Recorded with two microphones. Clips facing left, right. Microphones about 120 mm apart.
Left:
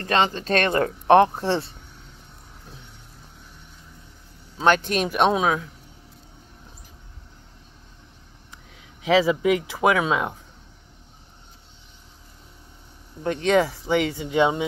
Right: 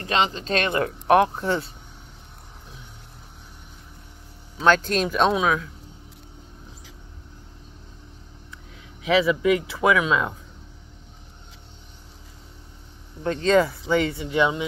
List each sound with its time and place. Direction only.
0.0 s speech: 45° left (ahead or behind); by 1.7 s 30° left (ahead or behind)
4.6 s speech: 20° left (ahead or behind)
9.0 s speech: 30° left (ahead or behind)
13.2 s speech: 15° left (ahead or behind)